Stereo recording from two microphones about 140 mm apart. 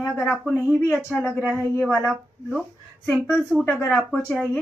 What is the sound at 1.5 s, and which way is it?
A woman's voice, centre (ahead or behind).